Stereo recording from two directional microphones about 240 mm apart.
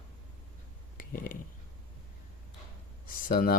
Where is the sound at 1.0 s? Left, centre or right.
Left.